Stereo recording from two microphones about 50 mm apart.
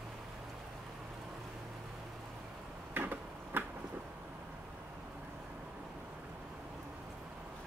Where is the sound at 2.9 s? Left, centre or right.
Right.